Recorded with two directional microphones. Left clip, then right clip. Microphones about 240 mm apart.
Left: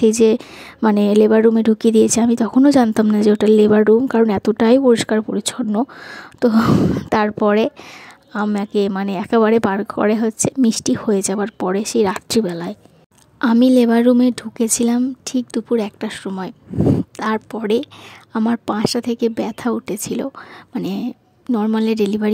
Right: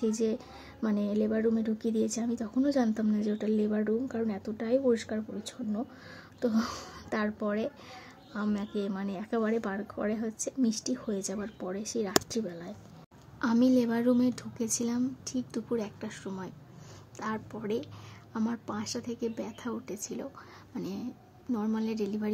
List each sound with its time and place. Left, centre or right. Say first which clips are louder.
0.0 s a woman's voice: left 18 dB; left